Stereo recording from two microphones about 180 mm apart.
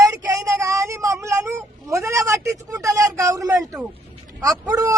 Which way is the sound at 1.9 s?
15° right (ahead or behind).